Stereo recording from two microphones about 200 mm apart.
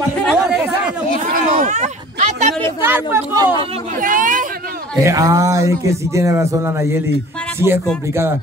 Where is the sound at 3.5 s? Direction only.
25° right (ahead or behind).